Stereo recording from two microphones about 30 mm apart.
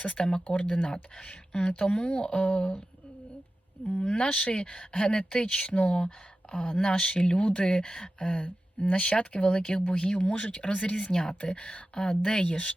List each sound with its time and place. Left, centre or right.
0.0 s speech: left
0.7 s speech: left
1.1 s speech: left
4.0 s speech: left
7.9 s speech: left
11.1 s speech: left
11.5 s speech: left
11.9 s speech: left
12.5 s speech: left